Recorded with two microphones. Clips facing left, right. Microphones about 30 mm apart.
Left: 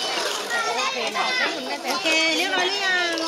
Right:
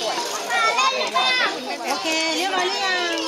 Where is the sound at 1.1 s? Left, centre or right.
Right.